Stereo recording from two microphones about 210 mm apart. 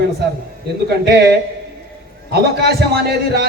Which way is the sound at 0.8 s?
50° right (ahead or behind).